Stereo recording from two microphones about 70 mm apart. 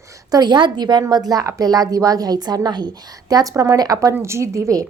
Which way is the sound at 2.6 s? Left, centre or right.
Right.